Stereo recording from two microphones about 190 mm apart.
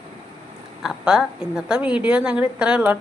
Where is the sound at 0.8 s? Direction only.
5° right (ahead or behind).